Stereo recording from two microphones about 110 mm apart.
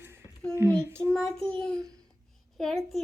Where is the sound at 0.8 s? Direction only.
20° right (ahead or behind).